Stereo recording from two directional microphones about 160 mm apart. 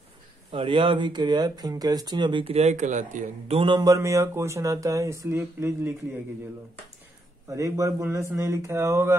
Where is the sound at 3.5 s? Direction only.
30° right (ahead or behind).